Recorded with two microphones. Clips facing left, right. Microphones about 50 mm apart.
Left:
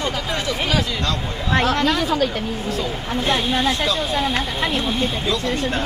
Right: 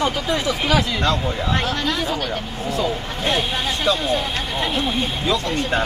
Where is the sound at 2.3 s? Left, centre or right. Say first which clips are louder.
Left 1 dB; centre.